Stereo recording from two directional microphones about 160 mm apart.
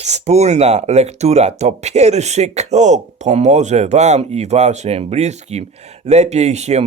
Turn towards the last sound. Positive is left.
turn(degrees=-45)  # may be behind; listen again after turning